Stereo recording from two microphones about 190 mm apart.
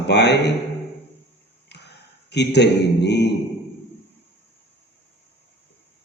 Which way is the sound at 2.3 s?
65° left (ahead or behind).